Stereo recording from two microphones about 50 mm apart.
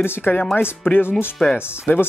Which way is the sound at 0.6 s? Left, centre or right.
Left.